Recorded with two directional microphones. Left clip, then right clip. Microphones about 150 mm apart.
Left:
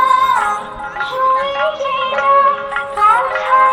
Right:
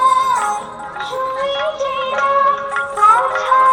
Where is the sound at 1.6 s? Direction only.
60° left (ahead or behind).